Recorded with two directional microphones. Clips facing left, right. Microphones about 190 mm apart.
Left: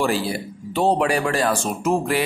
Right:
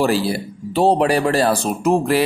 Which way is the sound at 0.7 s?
35° right (ahead or behind).